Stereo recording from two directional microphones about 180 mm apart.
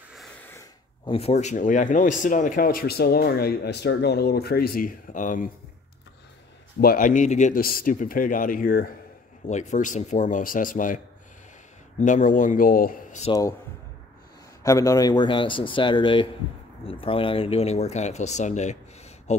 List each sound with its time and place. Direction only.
0.4 s a sound: 10° left (ahead or behind)
1.0 s speech: 35° left (ahead or behind)
6.8 s speech: 50° left (ahead or behind)
9.5 s speech: 40° left (ahead or behind)
12.0 s speech: 45° left (ahead or behind)
13.3 s speech: 20° left (ahead or behind)
14.6 s speech: 15° left (ahead or behind); by 18.8 s 40° left (ahead or behind)